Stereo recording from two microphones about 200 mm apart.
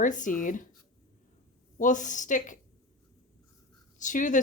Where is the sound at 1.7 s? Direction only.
40° left (ahead or behind).